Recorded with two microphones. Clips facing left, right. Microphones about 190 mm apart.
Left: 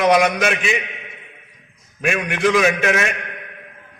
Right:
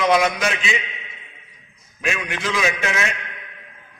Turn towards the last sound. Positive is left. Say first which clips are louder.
# left 5 dB
turn(degrees=55)  # may be behind; listen again after turning